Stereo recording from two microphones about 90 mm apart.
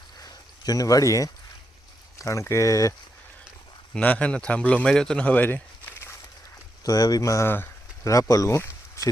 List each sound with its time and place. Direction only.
0.2 s a sound: 45° left (ahead or behind)
2.1 s speech: 35° left (ahead or behind)
3.9 s a man's voice: 15° left (ahead or behind)
6.8 s speech: 45° left (ahead or behind); by 7.7 s 25° left (ahead or behind)
8.0 s speech: 35° left (ahead or behind)